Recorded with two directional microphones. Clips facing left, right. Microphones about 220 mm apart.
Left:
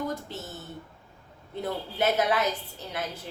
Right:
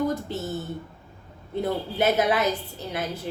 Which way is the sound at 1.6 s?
10° right (ahead or behind).